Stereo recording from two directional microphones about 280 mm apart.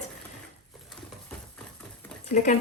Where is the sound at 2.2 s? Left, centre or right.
Left.